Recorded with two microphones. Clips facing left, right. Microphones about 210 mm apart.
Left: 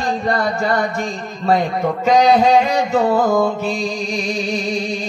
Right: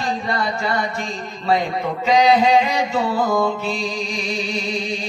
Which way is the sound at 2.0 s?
45° left (ahead or behind).